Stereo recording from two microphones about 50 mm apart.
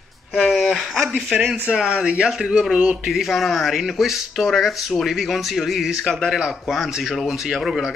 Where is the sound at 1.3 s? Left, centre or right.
Right.